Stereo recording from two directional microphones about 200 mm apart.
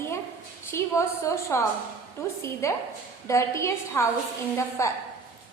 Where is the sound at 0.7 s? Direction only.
15° left (ahead or behind).